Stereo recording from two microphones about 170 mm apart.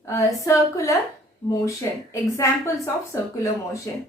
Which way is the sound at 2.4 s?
15° left (ahead or behind).